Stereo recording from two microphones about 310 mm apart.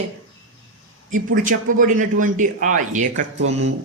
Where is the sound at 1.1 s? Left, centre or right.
Right.